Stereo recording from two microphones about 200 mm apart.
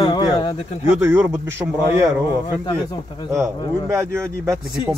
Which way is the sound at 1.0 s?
10° right (ahead or behind).